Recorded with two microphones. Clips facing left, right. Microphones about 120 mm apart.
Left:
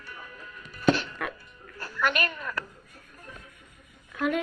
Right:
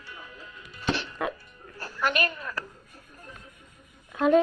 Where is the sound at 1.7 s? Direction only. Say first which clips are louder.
Even; 40° right (ahead or behind).